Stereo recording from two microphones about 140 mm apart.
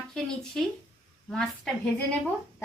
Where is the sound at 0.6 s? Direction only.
5° left (ahead or behind).